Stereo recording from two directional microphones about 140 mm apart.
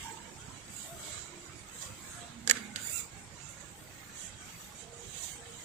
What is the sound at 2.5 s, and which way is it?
Camera, 55° right (ahead or behind).